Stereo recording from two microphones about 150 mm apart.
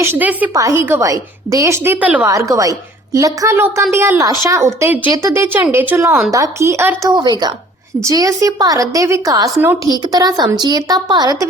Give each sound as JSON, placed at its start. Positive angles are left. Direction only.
{"t": 0.0, "sound": "a woman's voice", "side_deg": -15}
{"t": 2.3, "sound": "a woman's voice", "side_deg": -20}
{"t": 7.2, "sound": "a woman's voice", "side_deg": -30}
{"t": 9.9, "sound": "a woman's voice", "side_deg": -25}